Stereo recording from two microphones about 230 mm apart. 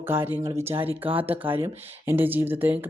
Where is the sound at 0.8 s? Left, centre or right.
Right.